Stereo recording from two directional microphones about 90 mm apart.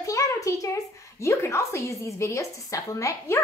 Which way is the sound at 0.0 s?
35° left (ahead or behind).